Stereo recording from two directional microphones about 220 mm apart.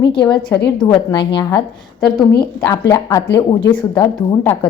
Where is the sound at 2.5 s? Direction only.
15° left (ahead or behind).